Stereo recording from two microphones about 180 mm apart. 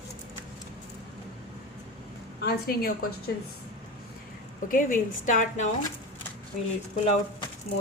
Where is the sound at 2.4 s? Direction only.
55° left (ahead or behind).